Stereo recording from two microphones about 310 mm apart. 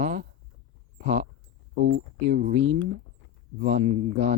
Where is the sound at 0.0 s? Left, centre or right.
Right.